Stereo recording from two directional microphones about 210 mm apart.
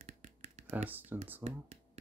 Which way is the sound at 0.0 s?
35° right (ahead or behind).